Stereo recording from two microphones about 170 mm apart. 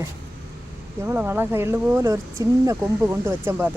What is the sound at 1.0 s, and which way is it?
Speech, 15° right (ahead or behind).